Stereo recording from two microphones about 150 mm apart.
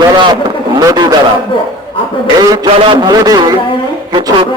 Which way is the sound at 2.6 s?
35° right (ahead or behind).